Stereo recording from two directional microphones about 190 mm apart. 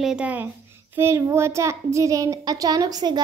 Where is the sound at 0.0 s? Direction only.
5° right (ahead or behind).